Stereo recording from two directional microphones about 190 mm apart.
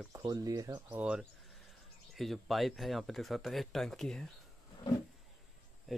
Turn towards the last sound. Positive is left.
turn(degrees=0)  # may be behind; listen again after turning